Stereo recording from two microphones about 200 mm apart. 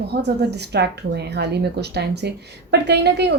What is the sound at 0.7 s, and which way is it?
A woman's voice, 55° right (ahead or behind).